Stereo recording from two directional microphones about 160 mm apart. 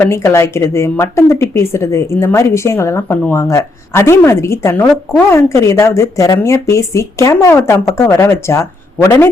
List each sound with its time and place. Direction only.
0.1 s speech: 15° left (ahead or behind)